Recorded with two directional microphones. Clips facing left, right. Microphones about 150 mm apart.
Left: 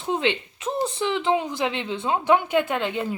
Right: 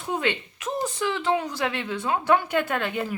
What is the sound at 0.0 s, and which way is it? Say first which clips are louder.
A woman's voice: left 3 dB; 25° left (ahead or behind).